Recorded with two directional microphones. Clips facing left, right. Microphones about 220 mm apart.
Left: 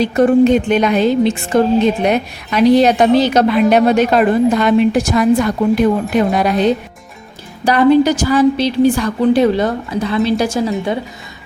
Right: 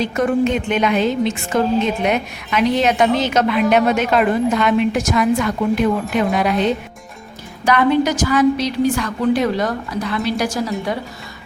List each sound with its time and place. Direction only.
0.0 s a woman's voice: 35° left (ahead or behind)